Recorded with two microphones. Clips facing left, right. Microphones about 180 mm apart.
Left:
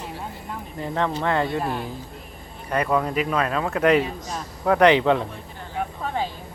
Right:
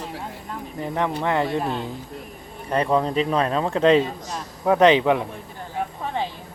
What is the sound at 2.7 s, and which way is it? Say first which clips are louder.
Speech: right 2 dB; 25° right (ahead or behind).